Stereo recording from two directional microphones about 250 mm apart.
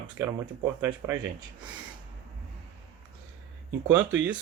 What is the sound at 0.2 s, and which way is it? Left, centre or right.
Speech, centre.